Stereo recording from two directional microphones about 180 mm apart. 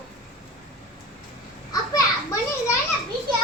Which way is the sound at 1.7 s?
20° left (ahead or behind).